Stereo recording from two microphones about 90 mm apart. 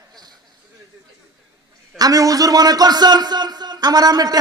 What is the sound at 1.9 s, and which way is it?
Speech, 40° right (ahead or behind).